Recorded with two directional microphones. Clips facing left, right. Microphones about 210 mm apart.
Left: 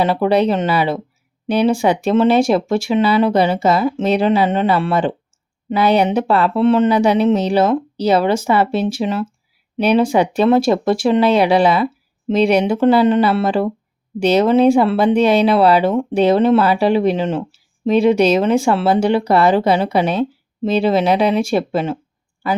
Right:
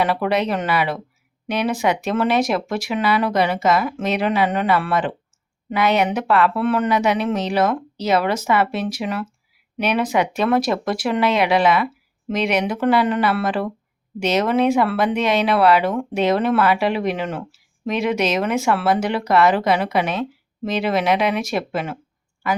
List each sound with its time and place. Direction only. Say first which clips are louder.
0.0 s speech: left 5 dB; 30° left (ahead or behind)